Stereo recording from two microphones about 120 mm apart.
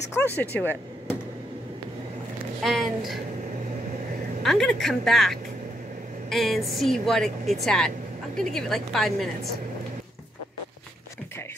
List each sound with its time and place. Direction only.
0.1 s speech: 15° left (ahead or behind)
2.6 s speech: centre (ahead or behind)
4.4 s speech: centre (ahead or behind)